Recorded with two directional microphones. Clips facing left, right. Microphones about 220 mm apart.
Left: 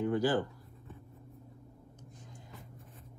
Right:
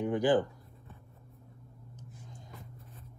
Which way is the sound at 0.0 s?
15° right (ahead or behind).